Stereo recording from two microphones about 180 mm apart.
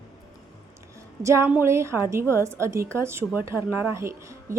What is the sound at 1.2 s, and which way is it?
Speech, 15° right (ahead or behind).